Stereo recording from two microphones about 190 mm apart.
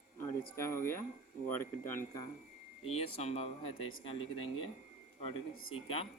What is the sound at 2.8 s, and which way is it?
Speech, 30° left (ahead or behind).